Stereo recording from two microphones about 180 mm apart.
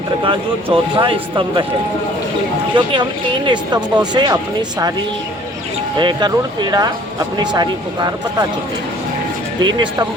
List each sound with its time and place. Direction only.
0.3 s speech: 30° right (ahead or behind)
2.7 s speech: 25° right (ahead or behind)
6.0 s speech: 25° right (ahead or behind)
9.6 s speech: 25° right (ahead or behind)